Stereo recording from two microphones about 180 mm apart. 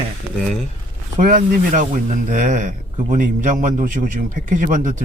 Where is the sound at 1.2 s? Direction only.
45° right (ahead or behind).